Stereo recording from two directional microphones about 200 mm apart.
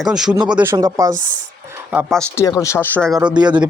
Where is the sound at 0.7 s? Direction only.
20° right (ahead or behind).